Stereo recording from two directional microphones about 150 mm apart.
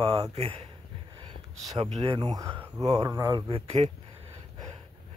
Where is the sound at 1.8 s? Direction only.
40° right (ahead or behind); by 3.3 s 25° right (ahead or behind).